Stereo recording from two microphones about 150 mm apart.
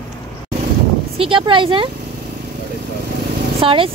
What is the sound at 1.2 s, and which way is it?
Speech, 35° right (ahead or behind).